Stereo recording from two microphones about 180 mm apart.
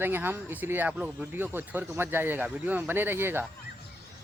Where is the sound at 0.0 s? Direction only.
10° right (ahead or behind).